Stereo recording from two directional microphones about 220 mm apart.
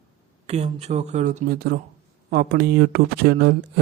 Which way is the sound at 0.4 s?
30° right (ahead or behind).